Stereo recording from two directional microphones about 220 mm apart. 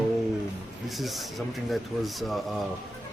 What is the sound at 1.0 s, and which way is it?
Speech, centre (ahead or behind).